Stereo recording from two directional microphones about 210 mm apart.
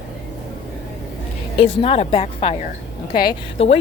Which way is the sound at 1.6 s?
25° left (ahead or behind).